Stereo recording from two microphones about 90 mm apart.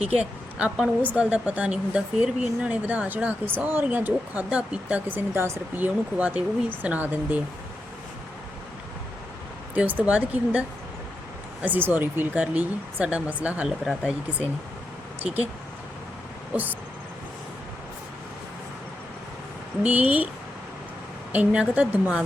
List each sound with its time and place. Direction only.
0.2 s a woman's voice: 15° right (ahead or behind)
9.7 s a woman's voice: 15° right (ahead or behind)
13.7 s speech: 5° right (ahead or behind)
15.2 s a woman's voice: 15° right (ahead or behind)
19.8 s a woman's voice: 15° right (ahead or behind)
21.3 s a woman's voice: 15° right (ahead or behind)